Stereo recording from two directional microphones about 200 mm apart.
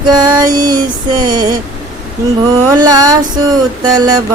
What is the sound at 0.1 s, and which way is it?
Female singing, 20° right (ahead or behind).